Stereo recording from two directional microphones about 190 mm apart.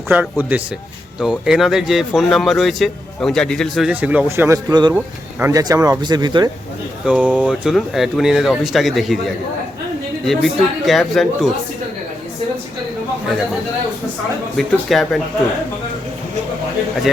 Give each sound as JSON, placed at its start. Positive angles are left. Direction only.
{"t": 0.1, "sound": "a man's voice", "side_deg": -10}
{"t": 7.0, "sound": "speech", "side_deg": -5}
{"t": 14.5, "sound": "speech", "side_deg": 0}